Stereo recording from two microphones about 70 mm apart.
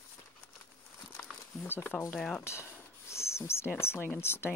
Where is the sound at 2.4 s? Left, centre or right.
Left.